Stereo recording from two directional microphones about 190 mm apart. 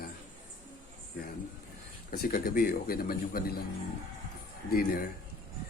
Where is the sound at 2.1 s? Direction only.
50° left (ahead or behind).